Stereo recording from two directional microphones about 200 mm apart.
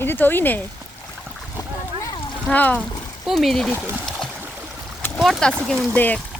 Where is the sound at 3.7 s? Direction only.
10° right (ahead or behind).